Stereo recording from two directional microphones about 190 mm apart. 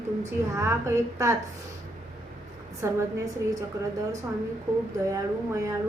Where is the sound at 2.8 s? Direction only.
15° right (ahead or behind).